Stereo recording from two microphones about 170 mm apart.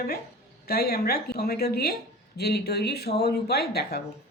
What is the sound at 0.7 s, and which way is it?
Speech, 65° left (ahead or behind).